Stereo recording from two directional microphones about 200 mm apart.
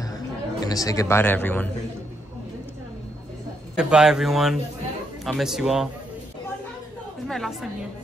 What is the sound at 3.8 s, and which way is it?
A man's voice, 5° right (ahead or behind).